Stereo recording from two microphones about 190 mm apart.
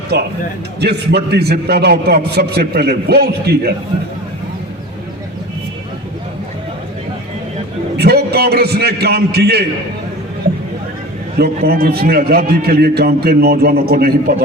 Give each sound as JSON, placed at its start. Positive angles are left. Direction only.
{"t": 0.1, "sound": "a man's voice", "side_deg": -55}
{"t": 7.9, "sound": "a man's voice", "side_deg": -55}
{"t": 11.3, "sound": "a man's voice", "side_deg": -55}